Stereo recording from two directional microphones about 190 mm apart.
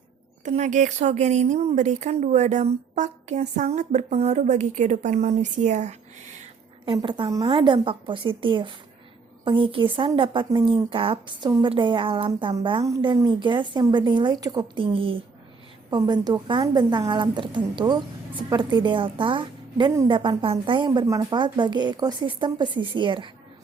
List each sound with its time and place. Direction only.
0.4 s a woman's voice: 40° right (ahead or behind)
6.8 s speech: 25° right (ahead or behind)